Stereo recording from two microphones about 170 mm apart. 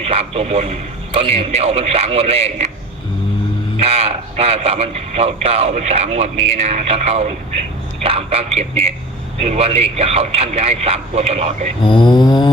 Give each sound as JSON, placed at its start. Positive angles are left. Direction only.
{"t": 0.0, "sound": "speech", "side_deg": -35}
{"t": 3.8, "sound": "speech", "side_deg": -35}
{"t": 11.9, "sound": "a sound", "side_deg": 25}